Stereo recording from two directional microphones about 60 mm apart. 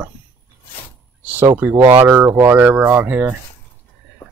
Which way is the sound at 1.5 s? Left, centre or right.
Right.